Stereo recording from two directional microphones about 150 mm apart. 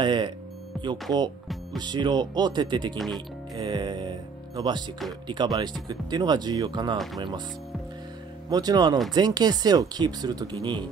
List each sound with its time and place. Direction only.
0.0 s music: 30° right (ahead or behind)
0.7 s music: centre (ahead or behind)
1.8 s speech: 30° right (ahead or behind)
8.5 s speech: 25° right (ahead or behind)